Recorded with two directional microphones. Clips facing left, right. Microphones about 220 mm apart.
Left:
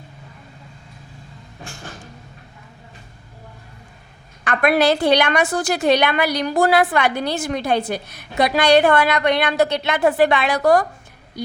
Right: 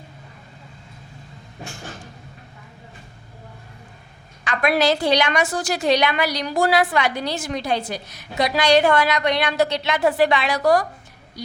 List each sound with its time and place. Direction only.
4.4 s a woman's voice: 55° left (ahead or behind)